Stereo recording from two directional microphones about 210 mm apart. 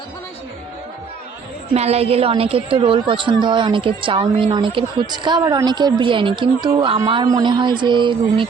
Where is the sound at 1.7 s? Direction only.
30° right (ahead or behind).